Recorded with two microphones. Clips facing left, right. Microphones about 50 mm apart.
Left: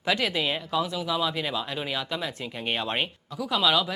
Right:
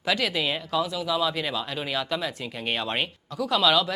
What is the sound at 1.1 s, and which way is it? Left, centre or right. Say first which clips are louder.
Speech: right 1 dB; centre.